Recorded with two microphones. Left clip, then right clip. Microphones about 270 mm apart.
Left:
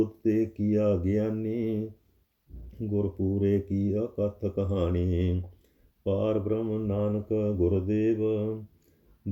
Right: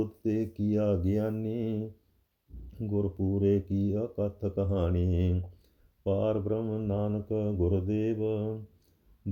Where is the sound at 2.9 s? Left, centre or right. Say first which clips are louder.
Left 2 dB; centre.